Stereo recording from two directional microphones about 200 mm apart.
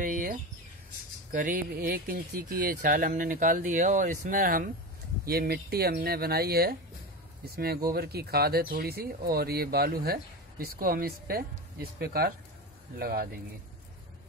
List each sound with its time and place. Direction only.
0.0 s bird: 45° right (ahead or behind)
1.3 s speech: 45° right (ahead or behind)